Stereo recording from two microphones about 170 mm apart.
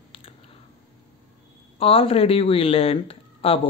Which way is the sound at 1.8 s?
35° left (ahead or behind).